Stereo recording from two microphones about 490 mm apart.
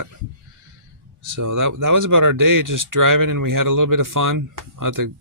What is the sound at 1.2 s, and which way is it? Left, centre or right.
Speech, right.